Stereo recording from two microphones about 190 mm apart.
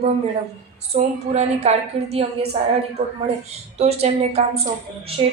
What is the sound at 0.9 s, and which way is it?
A woman's voice, 35° right (ahead or behind).